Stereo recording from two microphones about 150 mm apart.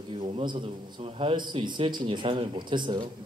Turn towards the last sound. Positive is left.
turn(degrees=-30)  # may be behind; listen again after turning